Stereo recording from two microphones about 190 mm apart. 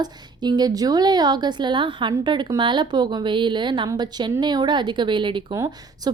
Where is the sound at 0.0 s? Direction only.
20° right (ahead or behind).